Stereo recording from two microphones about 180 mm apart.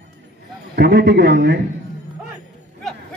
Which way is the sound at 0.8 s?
65° right (ahead or behind).